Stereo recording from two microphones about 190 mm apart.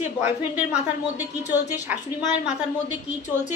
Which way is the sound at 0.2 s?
10° right (ahead or behind).